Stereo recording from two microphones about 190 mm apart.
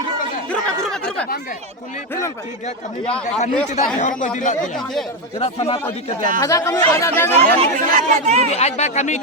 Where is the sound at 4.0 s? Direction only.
45° left (ahead or behind).